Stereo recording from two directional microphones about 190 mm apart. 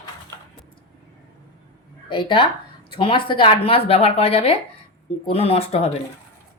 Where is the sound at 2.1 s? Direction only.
25° left (ahead or behind).